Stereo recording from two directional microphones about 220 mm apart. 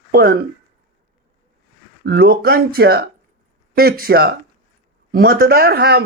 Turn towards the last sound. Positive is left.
turn(degrees=-45)  # may be behind; listen again after turning